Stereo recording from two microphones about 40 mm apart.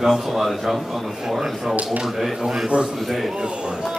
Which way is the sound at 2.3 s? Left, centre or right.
Centre.